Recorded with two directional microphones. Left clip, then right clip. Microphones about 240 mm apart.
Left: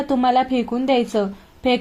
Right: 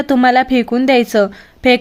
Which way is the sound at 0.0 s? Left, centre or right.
Right.